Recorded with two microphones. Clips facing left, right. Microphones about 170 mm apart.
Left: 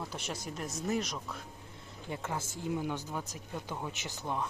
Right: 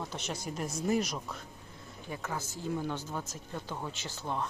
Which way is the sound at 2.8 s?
10° left (ahead or behind).